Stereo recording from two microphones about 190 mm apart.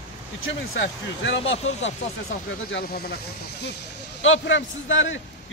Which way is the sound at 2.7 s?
55° left (ahead or behind).